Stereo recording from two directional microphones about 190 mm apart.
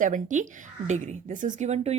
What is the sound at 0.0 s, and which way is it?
Speech, 40° right (ahead or behind).